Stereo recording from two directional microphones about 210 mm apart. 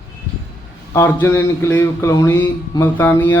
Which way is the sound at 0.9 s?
10° left (ahead or behind).